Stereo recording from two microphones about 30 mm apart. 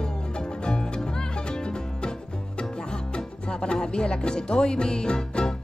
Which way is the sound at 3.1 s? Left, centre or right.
Left.